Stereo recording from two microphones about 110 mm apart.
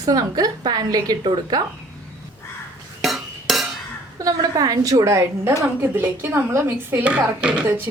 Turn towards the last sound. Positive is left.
turn(degrees=-15)  # may be behind; listen again after turning